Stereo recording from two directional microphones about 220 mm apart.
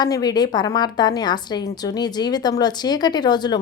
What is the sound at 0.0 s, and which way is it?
A woman's voice, 20° left (ahead or behind).